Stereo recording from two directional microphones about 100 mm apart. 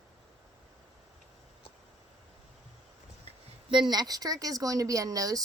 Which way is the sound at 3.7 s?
50° right (ahead or behind).